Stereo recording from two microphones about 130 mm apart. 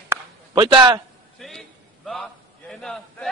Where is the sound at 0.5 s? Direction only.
35° right (ahead or behind).